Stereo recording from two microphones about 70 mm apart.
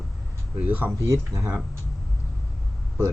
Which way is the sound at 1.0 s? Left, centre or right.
Right.